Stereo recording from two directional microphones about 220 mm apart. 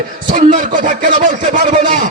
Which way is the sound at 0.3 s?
35° right (ahead or behind).